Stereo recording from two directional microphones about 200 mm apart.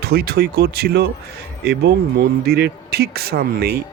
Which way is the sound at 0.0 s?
50° right (ahead or behind).